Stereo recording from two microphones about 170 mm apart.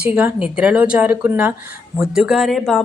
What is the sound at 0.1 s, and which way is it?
Speech, 10° right (ahead or behind).